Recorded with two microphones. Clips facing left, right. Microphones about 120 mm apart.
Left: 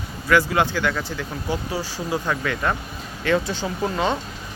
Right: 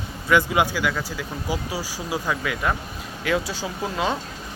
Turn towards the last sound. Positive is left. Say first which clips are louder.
# left 3 dB
turn(degrees=0)  # may be behind; listen again after turning